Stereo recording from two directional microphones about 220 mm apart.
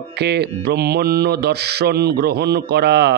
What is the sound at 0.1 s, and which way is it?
Speech, 50° right (ahead or behind).